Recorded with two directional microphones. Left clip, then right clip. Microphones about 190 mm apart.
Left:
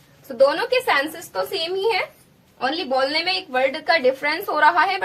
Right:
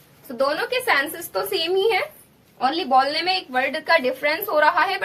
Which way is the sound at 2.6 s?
15° right (ahead or behind).